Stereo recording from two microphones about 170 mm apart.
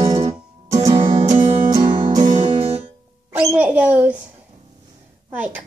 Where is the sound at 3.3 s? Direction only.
10° right (ahead or behind).